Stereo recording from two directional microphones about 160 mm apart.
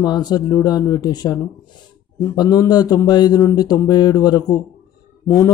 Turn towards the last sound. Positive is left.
turn(degrees=20)  # may be behind; listen again after turning